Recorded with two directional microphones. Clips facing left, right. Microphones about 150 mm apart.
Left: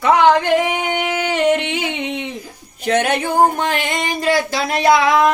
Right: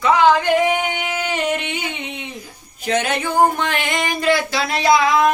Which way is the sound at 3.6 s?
35° left (ahead or behind).